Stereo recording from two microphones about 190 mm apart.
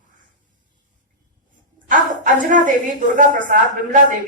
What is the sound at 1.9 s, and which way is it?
A woman's voice, 45° right (ahead or behind).